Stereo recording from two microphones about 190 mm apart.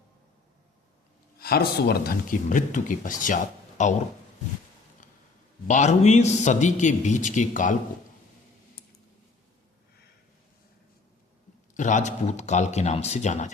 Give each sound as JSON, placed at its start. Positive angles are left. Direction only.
{"t": 1.4, "sound": "a man's voice", "side_deg": 55}
{"t": 5.6, "sound": "a man's voice", "side_deg": 40}
{"t": 11.7, "sound": "a man's voice", "side_deg": 40}